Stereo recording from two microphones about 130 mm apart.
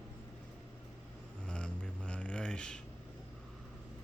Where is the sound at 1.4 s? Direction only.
10° left (ahead or behind).